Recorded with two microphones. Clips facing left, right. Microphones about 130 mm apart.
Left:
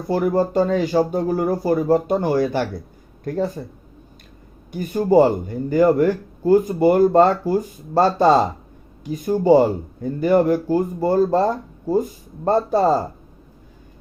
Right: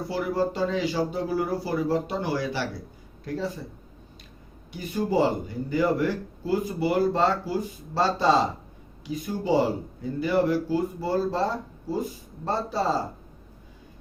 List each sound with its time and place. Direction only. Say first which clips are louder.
0.1 s speech: left 9 dB; 50° left (ahead or behind)
4.7 s speech: left 9 dB; 50° left (ahead or behind)